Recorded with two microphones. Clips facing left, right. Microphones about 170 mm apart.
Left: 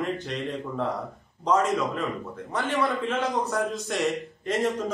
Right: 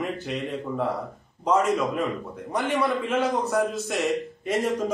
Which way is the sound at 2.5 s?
15° right (ahead or behind).